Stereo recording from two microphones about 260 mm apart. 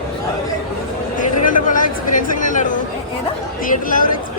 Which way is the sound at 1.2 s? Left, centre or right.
Left.